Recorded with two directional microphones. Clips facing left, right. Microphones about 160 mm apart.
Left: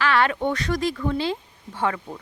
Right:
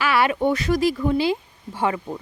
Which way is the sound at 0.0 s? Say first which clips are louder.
Right 2 dB; 10° right (ahead or behind).